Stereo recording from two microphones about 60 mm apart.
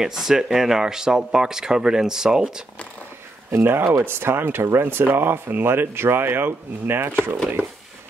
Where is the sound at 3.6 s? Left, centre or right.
Right.